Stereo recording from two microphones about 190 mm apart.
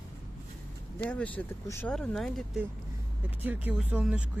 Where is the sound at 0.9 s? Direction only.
10° left (ahead or behind).